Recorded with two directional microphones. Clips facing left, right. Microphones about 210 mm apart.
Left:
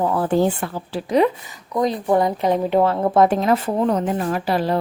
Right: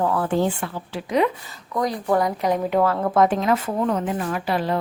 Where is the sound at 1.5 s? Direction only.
20° left (ahead or behind).